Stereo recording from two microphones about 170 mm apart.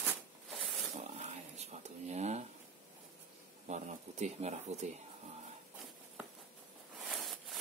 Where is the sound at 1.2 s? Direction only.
40° right (ahead or behind).